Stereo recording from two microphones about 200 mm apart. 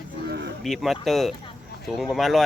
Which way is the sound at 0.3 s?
60° right (ahead or behind).